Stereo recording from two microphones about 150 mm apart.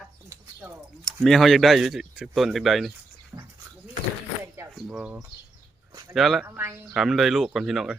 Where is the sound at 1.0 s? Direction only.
Centre (ahead or behind).